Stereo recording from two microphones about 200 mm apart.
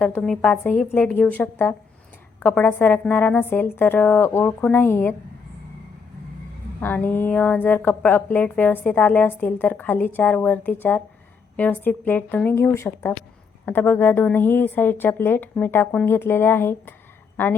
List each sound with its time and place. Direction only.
0.0 s a woman's voice: 5° left (ahead or behind)
6.7 s a woman's voice: 10° left (ahead or behind)